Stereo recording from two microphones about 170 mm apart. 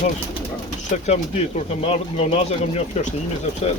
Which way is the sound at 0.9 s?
40° left (ahead or behind).